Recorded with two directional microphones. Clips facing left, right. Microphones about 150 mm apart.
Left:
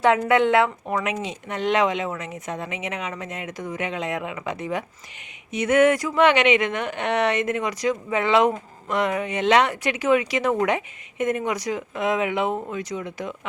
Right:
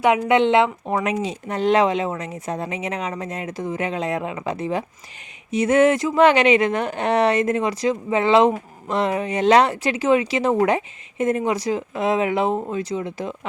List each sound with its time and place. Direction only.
0.0 s a woman's voice: 15° right (ahead or behind); by 13.3 s 30° right (ahead or behind)